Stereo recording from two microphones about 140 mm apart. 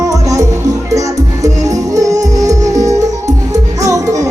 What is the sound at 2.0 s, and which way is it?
Music, 25° right (ahead or behind).